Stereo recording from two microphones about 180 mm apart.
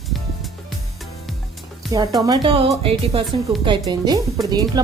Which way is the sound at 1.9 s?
20° right (ahead or behind).